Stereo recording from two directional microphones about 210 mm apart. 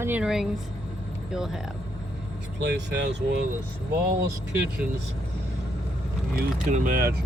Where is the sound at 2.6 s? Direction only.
55° right (ahead or behind).